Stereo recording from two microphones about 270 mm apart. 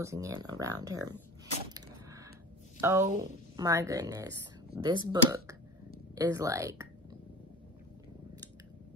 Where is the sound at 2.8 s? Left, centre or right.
Centre.